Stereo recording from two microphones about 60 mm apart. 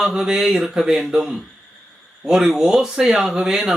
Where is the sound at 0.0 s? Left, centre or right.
Centre.